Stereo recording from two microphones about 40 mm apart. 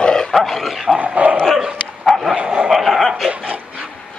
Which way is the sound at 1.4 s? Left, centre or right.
Centre.